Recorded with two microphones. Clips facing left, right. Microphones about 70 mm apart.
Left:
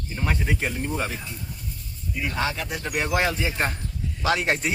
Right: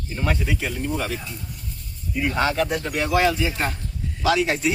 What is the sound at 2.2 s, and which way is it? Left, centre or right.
Speech, right.